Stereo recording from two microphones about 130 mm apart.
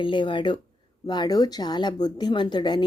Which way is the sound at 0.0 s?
40° left (ahead or behind).